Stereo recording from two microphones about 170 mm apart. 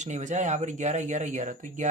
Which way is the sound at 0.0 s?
45° right (ahead or behind).